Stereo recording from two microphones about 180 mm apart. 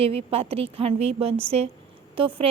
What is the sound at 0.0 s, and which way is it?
A woman's voice, 35° right (ahead or behind).